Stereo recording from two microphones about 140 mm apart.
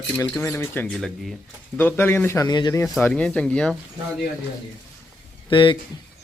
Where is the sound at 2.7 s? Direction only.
15° left (ahead or behind).